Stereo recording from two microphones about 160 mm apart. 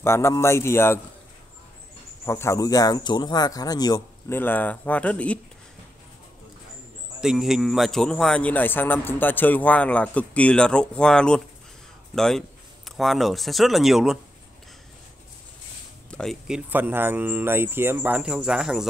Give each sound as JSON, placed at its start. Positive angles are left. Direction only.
{"t": 0.0, "sound": "speech", "side_deg": 15}
{"t": 2.2, "sound": "speech", "side_deg": 15}
{"t": 4.3, "sound": "speech", "side_deg": 10}
{"t": 7.2, "sound": "speech", "side_deg": 0}
{"t": 16.1, "sound": "speech", "side_deg": 5}